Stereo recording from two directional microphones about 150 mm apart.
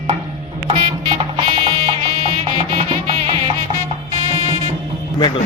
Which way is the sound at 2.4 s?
40° right (ahead or behind).